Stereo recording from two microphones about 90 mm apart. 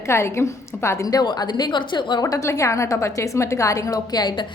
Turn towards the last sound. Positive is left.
turn(degrees=50)  # may be behind; listen again after turning